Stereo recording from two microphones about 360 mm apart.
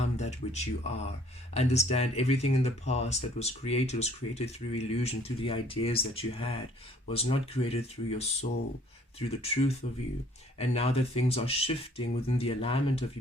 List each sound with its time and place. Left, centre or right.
0.0 s speech: centre